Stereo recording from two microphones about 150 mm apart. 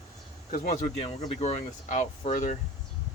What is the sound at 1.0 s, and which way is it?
Speech, 40° left (ahead or behind).